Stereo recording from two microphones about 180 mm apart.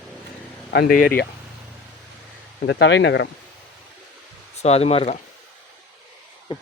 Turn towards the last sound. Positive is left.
turn(degrees=25)  # may be behind; listen again after turning